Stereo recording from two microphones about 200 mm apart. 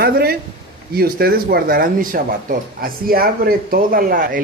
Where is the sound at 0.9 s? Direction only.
50° right (ahead or behind).